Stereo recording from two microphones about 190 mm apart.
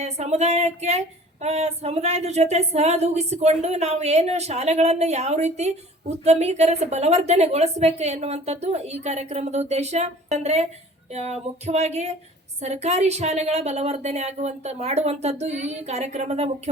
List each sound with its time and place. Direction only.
0.0 s female singing: 35° right (ahead or behind)